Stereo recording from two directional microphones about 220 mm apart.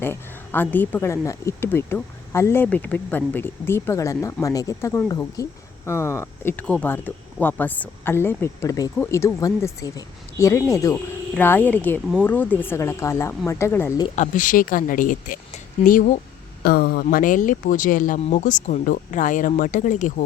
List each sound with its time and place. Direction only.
0.0 s a woman's voice: 10° left (ahead or behind)
14.2 s speech: 35° left (ahead or behind)